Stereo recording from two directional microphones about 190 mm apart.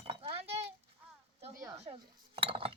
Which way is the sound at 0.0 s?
30° right (ahead or behind).